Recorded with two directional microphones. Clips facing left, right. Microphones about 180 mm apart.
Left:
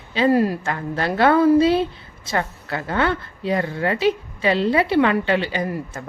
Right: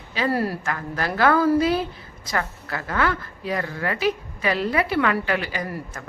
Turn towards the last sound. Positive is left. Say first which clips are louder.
# left 5 dB
turn(degrees=25)  # may be behind; listen again after turning